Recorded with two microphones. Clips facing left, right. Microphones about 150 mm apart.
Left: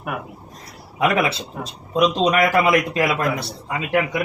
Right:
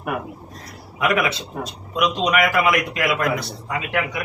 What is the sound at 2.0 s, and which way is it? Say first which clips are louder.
A man's voice: left 3 dB; 30° left (ahead or behind).